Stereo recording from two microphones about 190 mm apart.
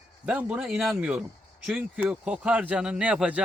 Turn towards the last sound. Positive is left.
turn(degrees=-5)  # may be behind; listen again after turning